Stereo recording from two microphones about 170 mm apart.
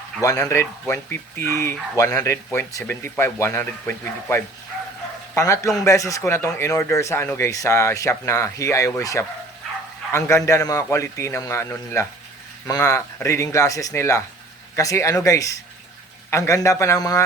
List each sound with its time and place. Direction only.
0.2 s speech: 20° left (ahead or behind)